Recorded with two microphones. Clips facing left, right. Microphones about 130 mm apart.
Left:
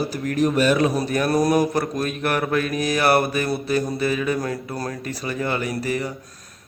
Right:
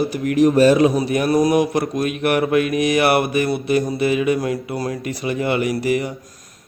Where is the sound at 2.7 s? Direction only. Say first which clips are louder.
Right 5 dB; 35° left (ahead or behind).